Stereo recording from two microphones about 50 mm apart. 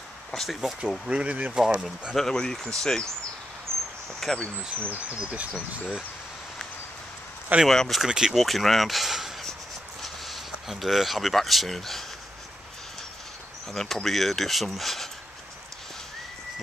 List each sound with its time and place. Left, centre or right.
0.3 s speech: centre
0.6 s speech: centre
1.2 s speech: right
2.1 s speech: centre
3.7 s cricket: centre
4.2 s speech: centre
4.7 s speech: right
7.6 s speech: centre
8.0 s speech: centre
8.4 s speech: centre
13.7 s speech: centre